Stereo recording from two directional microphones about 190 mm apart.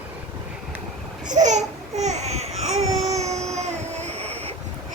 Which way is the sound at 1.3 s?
40° right (ahead or behind).